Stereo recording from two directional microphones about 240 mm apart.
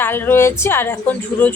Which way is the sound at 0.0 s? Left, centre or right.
Centre.